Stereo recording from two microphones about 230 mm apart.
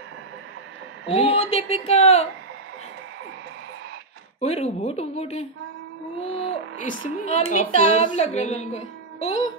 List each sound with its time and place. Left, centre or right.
1.1 s speech: left
4.4 s speech: left